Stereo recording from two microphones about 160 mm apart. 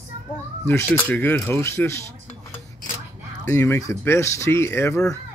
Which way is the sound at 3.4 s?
20° left (ahead or behind).